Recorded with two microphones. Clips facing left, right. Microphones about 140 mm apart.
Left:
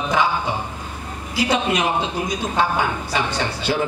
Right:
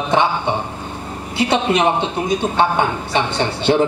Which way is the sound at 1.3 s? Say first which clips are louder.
Right 3 dB; 25° right (ahead or behind).